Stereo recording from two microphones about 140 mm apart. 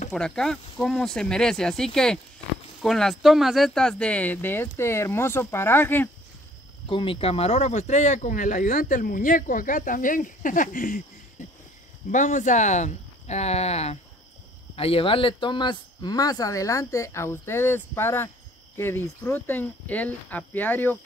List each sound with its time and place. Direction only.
0.1 s speech: 5° left (ahead or behind)
6.9 s speech: 40° left (ahead or behind); by 11.0 s 75° left (ahead or behind)
12.1 s speech: 65° left (ahead or behind); by 21.0 s 10° left (ahead or behind)